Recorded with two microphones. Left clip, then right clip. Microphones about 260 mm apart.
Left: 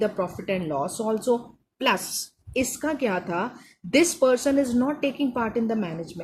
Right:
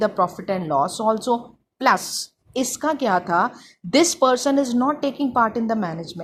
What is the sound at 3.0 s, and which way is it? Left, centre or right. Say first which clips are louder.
A woman's voice: right 9 dB; centre.